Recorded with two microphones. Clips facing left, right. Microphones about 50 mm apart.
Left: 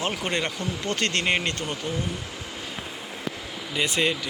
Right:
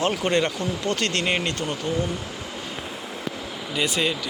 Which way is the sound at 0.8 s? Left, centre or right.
Left.